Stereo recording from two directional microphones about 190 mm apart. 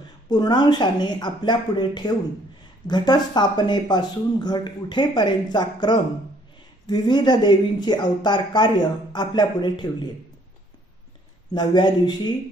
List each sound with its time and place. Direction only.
0.3 s speech: 20° left (ahead or behind)
11.5 s speech: 25° left (ahead or behind)